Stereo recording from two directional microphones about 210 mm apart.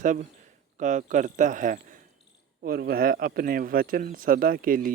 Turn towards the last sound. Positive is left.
turn(degrees=-40)  # may be behind; listen again after turning